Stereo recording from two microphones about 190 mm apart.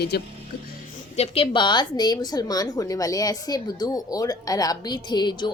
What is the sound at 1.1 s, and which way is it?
A woman's voice, 30° left (ahead or behind).